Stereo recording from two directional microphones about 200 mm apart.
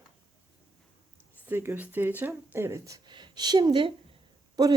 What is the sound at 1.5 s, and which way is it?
Speech, 10° right (ahead or behind).